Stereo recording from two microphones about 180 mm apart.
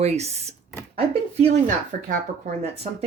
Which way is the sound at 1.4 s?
45° right (ahead or behind).